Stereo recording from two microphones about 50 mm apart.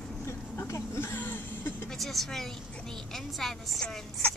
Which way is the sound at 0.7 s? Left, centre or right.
Left.